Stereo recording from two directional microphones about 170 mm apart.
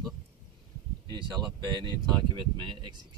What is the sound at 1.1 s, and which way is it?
Speech, 25° right (ahead or behind).